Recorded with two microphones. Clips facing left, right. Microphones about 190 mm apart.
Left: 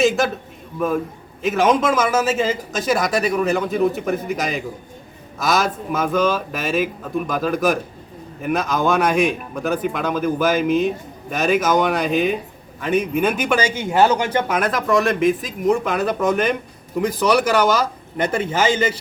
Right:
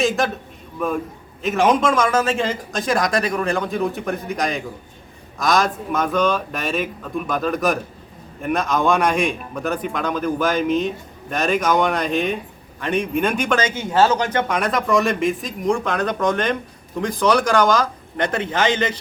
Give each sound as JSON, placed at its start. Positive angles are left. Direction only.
{"t": 0.2, "sound": "a man's voice", "side_deg": 0}